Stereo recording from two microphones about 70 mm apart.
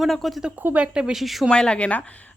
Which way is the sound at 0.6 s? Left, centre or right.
Right.